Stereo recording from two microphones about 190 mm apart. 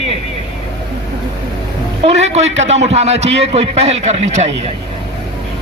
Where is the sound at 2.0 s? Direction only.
35° right (ahead or behind).